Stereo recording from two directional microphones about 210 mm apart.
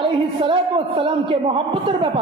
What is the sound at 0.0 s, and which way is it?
A man's voice, 25° right (ahead or behind).